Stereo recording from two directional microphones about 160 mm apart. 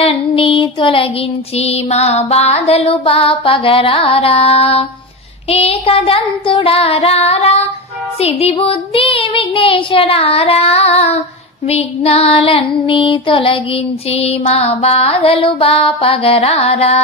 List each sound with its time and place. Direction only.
0.0 s music: 35° left (ahead or behind)